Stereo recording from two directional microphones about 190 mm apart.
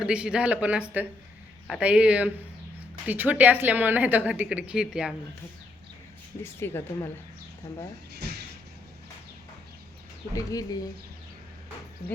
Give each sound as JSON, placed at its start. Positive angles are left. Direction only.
{"t": 0.0, "sound": "a woman's voice", "side_deg": -5}
{"t": 6.4, "sound": "a woman's voice", "side_deg": 15}
{"t": 10.3, "sound": "speech", "side_deg": 20}